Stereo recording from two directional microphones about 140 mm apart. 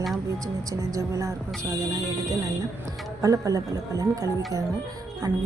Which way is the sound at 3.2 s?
25° right (ahead or behind).